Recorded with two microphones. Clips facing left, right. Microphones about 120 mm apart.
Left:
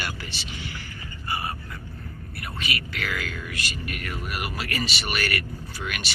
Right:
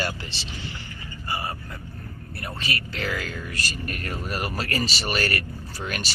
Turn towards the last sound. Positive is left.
turn(degrees=-35)  # may be behind; listen again after turning